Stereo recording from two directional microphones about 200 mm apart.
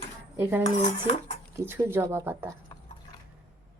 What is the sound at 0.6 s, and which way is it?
Dishes, 30° left (ahead or behind).